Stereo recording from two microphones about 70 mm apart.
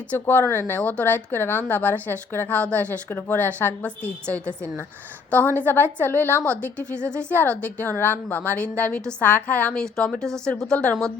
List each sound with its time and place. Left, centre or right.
0.1 s a woman's voice: left
10.0 s a woman's voice: centre